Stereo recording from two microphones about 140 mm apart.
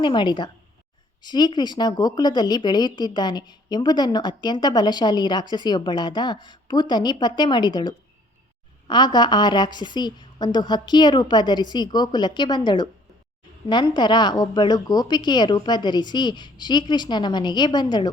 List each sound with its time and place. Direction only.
0.0 s speech: 35° left (ahead or behind)